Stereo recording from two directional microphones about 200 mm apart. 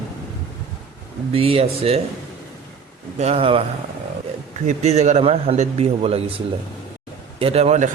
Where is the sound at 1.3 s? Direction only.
30° right (ahead or behind).